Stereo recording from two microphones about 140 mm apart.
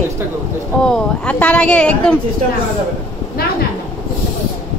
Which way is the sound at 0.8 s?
10° left (ahead or behind).